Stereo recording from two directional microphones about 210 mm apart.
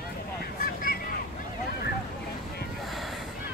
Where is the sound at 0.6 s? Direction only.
45° left (ahead or behind).